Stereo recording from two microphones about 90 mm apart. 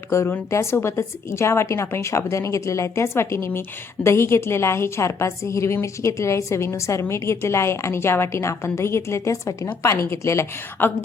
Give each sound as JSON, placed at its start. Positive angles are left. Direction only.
{"t": 0.1, "sound": "a woman's voice", "side_deg": 30}